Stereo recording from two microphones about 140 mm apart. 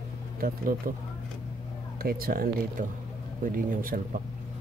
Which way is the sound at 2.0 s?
90° right.